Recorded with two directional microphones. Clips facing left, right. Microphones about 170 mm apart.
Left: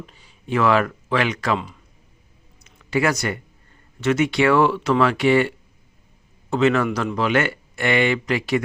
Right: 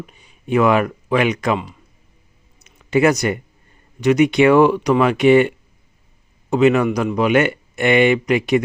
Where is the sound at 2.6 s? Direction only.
20° right (ahead or behind).